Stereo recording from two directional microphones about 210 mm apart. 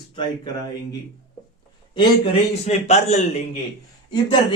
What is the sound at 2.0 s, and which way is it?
Speech, 25° left (ahead or behind).